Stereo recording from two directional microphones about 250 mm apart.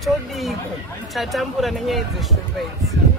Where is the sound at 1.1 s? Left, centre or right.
Centre.